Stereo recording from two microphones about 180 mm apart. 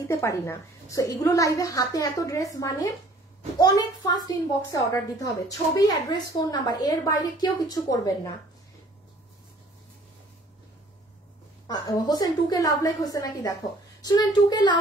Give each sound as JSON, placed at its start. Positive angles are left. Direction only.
{"t": 0.1, "sound": "a woman's voice", "side_deg": 15}
{"t": 11.6, "sound": "a woman's voice", "side_deg": 20}